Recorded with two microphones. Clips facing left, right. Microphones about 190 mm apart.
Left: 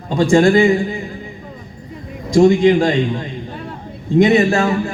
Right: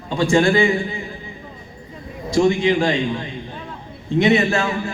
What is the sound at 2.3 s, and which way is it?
A man's voice, 40° left (ahead or behind).